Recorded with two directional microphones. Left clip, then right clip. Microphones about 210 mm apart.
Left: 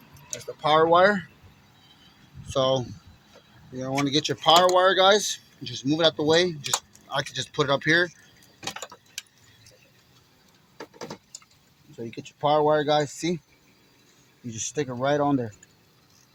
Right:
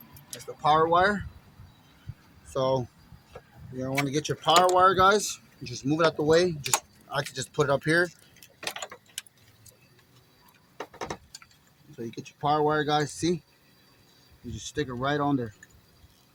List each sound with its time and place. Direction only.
0.6 s speech: 25° left (ahead or behind)
2.5 s speech: 15° left (ahead or behind)
12.1 s speech: 15° left (ahead or behind)
14.5 s speech: 20° left (ahead or behind)